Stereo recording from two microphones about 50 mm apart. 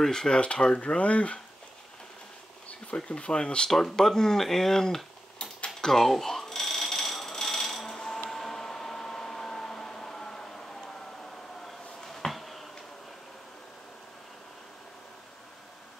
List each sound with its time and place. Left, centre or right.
0.0 s speech: centre
3.1 s speech: left
3.7 s speech: centre
5.8 s a sound: centre